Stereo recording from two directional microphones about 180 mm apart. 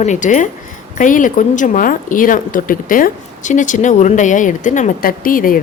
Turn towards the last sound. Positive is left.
turn(degrees=50)  # may be behind; listen again after turning